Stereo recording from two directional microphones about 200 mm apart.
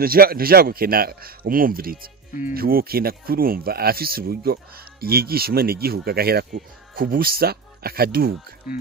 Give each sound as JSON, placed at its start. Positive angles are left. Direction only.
{"t": 0.0, "sound": "speech", "side_deg": -50}